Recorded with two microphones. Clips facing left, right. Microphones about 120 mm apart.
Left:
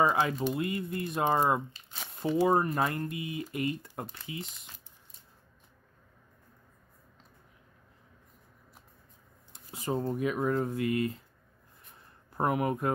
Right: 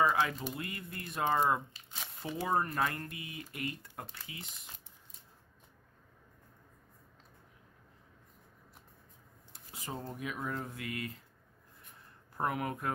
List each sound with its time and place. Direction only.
0.0 s speech: 30° left (ahead or behind)
9.8 s speech: 40° left (ahead or behind)
10.8 s speech: 30° left (ahead or behind)
12.4 s speech: 20° left (ahead or behind)